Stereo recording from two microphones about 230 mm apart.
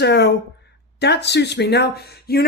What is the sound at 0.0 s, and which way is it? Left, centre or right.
Speech, left.